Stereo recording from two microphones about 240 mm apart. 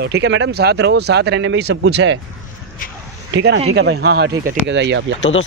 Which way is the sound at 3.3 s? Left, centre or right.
Right.